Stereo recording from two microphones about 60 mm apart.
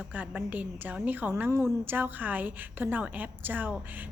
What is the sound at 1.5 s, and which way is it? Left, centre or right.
A woman's voice, right.